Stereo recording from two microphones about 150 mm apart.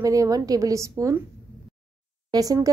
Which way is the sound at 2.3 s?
25° right (ahead or behind).